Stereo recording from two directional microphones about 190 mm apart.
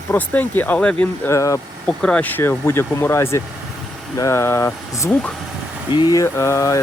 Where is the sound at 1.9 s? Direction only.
5° left (ahead or behind).